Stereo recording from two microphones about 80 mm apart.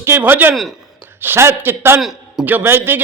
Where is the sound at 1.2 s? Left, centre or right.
Right.